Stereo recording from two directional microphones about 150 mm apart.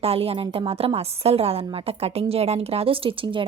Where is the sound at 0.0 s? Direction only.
40° right (ahead or behind).